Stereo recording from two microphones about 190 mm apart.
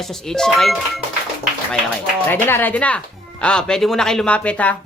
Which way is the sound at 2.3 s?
10° left (ahead or behind).